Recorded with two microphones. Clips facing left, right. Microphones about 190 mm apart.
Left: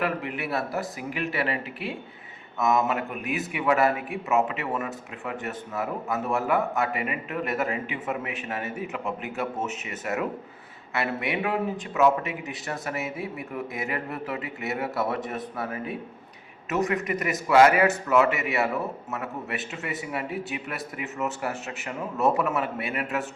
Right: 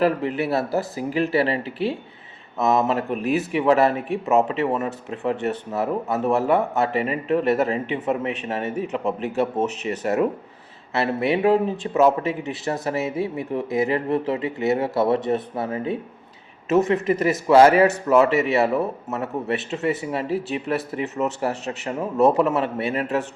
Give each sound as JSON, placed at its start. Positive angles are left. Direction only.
{"t": 0.0, "sound": "a man's voice", "side_deg": -35}